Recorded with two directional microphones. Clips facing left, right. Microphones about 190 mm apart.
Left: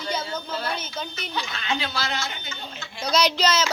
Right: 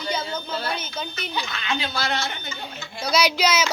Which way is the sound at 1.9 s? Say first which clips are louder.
Right 3 dB; 55° right (ahead or behind).